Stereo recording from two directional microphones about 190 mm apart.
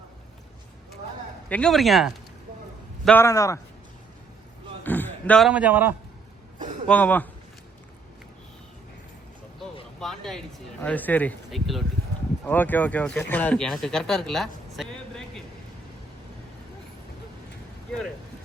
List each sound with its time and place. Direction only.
1.5 s speech: 5° left (ahead or behind)
3.2 s speech: 15° left (ahead or behind)
4.8 s a sound: 10° left (ahead or behind)
5.5 s a man's voice: 5° right (ahead or behind)
6.8 s speech: 10° left (ahead or behind)
10.0 s speech: centre (ahead or behind)